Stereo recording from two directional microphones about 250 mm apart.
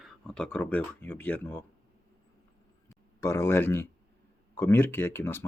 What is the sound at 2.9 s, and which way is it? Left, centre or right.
Speech, centre.